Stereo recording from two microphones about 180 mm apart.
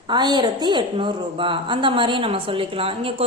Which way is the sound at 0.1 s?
25° right (ahead or behind).